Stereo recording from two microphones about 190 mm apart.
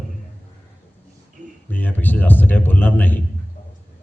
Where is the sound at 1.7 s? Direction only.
10° left (ahead or behind).